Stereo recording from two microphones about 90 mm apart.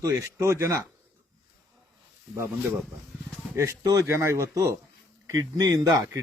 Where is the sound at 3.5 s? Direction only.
35° right (ahead or behind).